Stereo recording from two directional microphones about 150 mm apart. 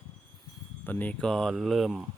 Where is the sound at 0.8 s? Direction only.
10° left (ahead or behind).